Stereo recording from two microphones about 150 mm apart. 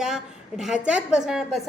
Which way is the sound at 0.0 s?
5° right (ahead or behind).